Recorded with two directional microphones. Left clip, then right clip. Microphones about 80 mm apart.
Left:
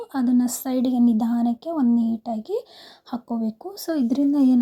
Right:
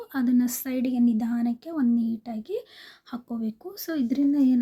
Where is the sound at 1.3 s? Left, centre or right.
Left.